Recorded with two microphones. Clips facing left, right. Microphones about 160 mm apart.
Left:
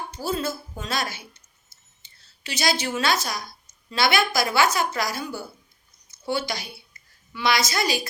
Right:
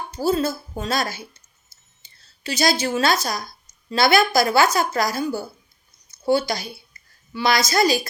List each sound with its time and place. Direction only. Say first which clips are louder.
0.1 s a woman's voice: right 7 dB; 40° right (ahead or behind)
2.0 s a sound: right 1 dB; 40° right (ahead or behind)
3.8 s a woman's voice: right 5 dB; 40° right (ahead or behind)